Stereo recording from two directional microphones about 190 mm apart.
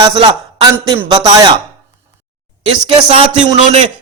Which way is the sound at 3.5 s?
35° right (ahead or behind).